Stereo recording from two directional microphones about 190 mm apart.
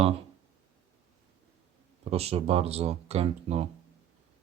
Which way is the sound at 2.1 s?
30° right (ahead or behind).